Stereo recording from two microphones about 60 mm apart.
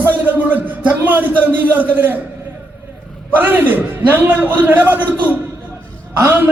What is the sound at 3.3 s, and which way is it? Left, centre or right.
A man's voice, right.